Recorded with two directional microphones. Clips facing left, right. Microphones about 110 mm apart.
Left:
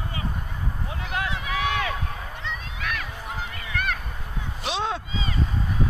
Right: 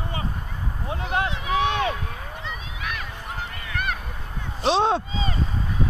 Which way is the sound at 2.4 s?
5° right (ahead or behind).